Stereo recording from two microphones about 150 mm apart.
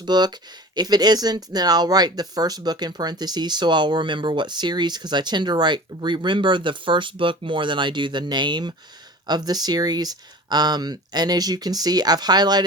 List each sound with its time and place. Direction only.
0.0 s speech: 30° right (ahead or behind)